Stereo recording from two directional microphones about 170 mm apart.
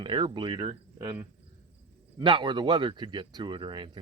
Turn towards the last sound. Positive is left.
turn(degrees=-30)  # may be behind; listen again after turning